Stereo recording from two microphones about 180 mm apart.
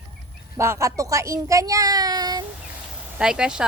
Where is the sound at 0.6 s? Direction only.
15° right (ahead or behind).